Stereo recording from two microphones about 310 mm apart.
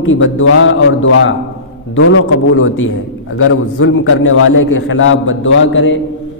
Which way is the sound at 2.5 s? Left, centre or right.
Left.